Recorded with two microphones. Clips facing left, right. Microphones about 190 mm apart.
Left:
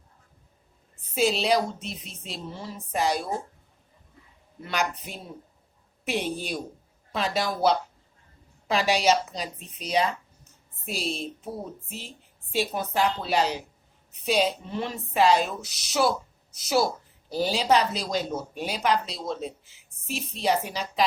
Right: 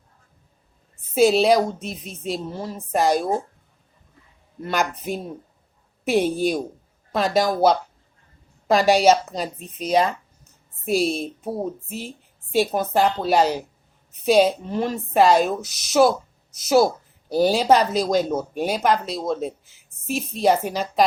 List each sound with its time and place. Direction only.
1.1 s a woman's voice: 50° right (ahead or behind)
4.6 s a woman's voice: 45° right (ahead or behind)